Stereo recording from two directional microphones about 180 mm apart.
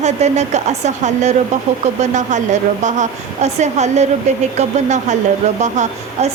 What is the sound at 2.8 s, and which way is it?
Speech, 40° right (ahead or behind).